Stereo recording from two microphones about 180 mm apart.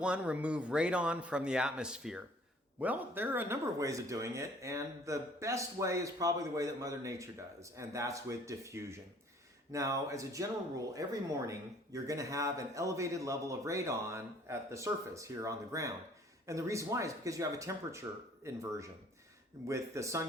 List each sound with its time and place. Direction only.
0.0 s speech: 5° right (ahead or behind)